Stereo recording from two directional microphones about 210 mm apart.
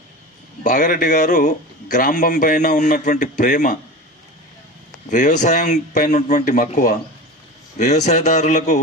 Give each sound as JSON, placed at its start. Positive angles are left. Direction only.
{"t": 0.6, "sound": "a man's voice", "side_deg": 40}
{"t": 5.1, "sound": "a man's voice", "side_deg": 35}